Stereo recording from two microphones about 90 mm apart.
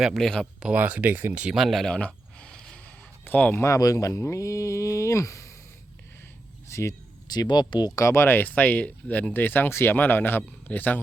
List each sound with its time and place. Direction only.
0.0 s speech: 5° right (ahead or behind)
0.6 s speech: 15° right (ahead or behind)
1.5 s a sound: centre (ahead or behind); by 3.6 s 20° left (ahead or behind)
3.6 s speech: 40° left (ahead or behind)
6.7 s speech: 35° left (ahead or behind)
7.3 s speech: 50° left (ahead or behind)
7.9 s speech: 30° left (ahead or behind)